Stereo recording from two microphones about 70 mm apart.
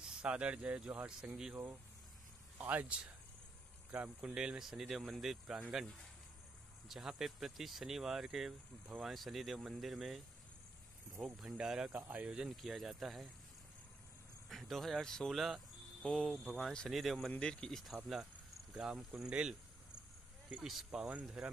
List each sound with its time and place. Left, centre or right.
0.1 s speech: centre
1.5 s speech: right; by 5.6 s centre
6.9 s speech: centre
11.9 s speech: right
12.4 s speech: centre
14.5 s speech: centre
20.6 s speech: centre
21.1 s speech: centre